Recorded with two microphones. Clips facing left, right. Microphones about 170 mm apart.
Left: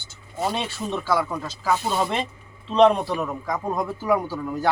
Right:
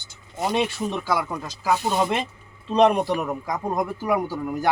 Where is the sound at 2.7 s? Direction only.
15° right (ahead or behind).